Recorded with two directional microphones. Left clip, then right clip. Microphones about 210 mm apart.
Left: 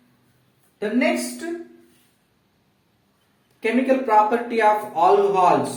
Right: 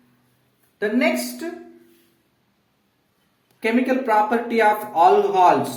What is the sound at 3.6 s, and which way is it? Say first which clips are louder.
Speech: left 1 dB; 50° right (ahead or behind).